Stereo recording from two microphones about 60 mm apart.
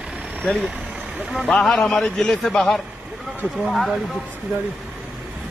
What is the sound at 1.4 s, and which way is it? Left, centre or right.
A man's voice, centre.